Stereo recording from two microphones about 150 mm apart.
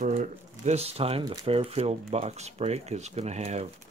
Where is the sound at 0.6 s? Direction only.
45° right (ahead or behind).